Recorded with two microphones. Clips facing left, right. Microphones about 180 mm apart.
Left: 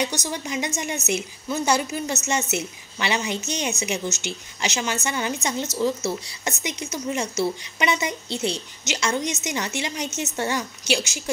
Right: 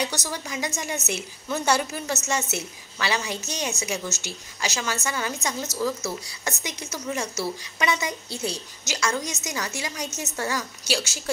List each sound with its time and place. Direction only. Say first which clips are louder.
0.0 s a woman's voice: left 3 dB; 15° left (ahead or behind)